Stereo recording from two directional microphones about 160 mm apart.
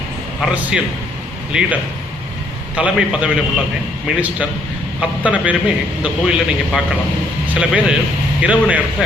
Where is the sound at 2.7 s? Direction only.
5° right (ahead or behind).